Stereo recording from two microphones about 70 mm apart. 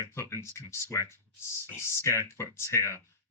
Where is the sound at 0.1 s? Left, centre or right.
Left.